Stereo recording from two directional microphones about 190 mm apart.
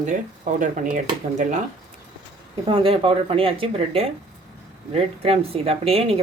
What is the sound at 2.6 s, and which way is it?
A woman's voice, 30° right (ahead or behind).